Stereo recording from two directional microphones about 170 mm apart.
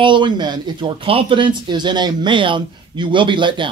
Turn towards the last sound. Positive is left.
turn(degrees=-30)  # may be behind; listen again after turning